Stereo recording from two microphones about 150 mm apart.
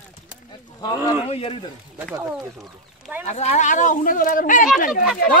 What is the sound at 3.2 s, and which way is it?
Speech, 50° left (ahead or behind).